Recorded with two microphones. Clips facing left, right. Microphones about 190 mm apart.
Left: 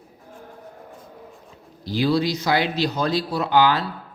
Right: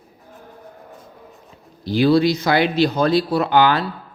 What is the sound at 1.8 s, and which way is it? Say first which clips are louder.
A man's voice: right 6 dB; 60° right (ahead or behind).